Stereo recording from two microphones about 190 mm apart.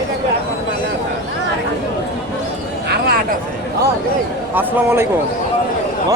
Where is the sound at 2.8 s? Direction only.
60° right (ahead or behind).